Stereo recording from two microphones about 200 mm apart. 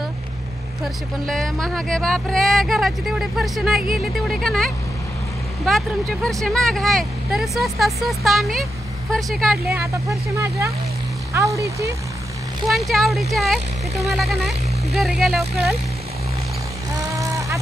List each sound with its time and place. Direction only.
1.2 s speech: centre (ahead or behind)
9.8 s speech: 15° right (ahead or behind)
12.6 s speech: centre (ahead or behind)
17.1 s vehicle: 15° right (ahead or behind)